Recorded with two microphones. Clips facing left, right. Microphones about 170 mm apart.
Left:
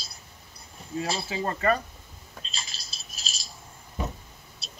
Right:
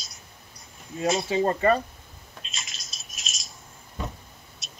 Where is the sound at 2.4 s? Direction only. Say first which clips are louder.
Left 1 dB; 35° left (ahead or behind).